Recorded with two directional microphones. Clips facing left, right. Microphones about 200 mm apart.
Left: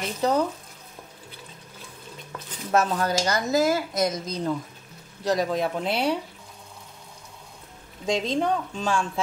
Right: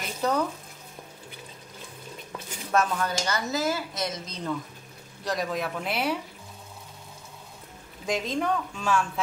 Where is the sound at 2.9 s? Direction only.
40° left (ahead or behind).